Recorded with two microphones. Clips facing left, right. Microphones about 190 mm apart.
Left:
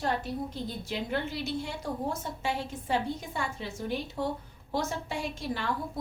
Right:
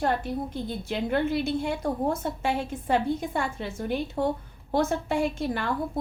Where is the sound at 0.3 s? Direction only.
55° right (ahead or behind).